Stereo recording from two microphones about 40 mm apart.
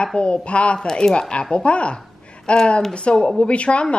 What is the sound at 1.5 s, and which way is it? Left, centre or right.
Speech, left.